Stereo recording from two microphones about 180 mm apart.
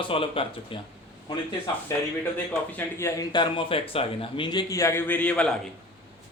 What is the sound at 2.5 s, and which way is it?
Speech, 10° left (ahead or behind).